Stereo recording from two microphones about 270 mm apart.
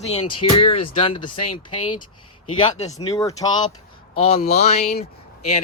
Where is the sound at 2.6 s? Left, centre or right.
Centre.